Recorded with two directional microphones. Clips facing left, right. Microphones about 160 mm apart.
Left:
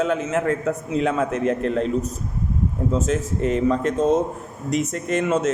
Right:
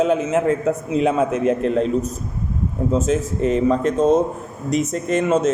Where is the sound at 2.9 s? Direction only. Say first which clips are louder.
Right 4 dB; 20° right (ahead or behind).